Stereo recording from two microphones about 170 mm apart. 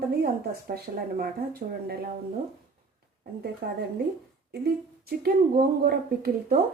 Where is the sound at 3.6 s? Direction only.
70° right (ahead or behind).